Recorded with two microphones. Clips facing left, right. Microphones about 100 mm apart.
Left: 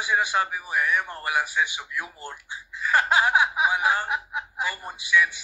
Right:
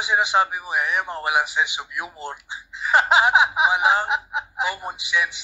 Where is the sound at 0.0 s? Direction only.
20° right (ahead or behind).